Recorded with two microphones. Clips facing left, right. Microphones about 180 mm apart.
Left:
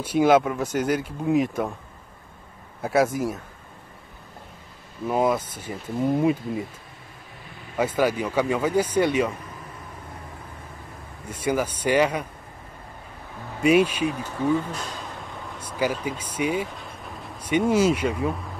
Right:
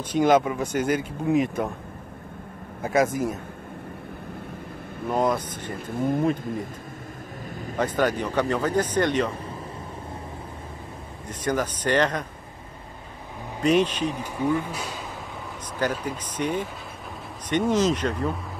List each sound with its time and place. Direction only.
0.0 s speech: 5° left (ahead or behind)
2.8 s speech: centre (ahead or behind)
5.0 s speech: 5° left (ahead or behind)
5.7 s speech: 50° right (ahead or behind)
6.0 s speech: 5° left (ahead or behind)
7.7 s speech: 5° left (ahead or behind)
11.2 s speech: 10° left (ahead or behind)
13.6 s speech: 10° left (ahead or behind)
14.2 s speech: 15° right (ahead or behind)
15.8 s speech: 5° left (ahead or behind)